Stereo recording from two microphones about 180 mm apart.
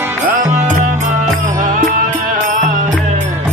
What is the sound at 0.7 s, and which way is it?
Music, 45° right (ahead or behind).